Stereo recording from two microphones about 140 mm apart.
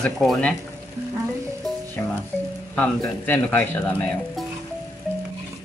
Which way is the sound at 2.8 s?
15° left (ahead or behind).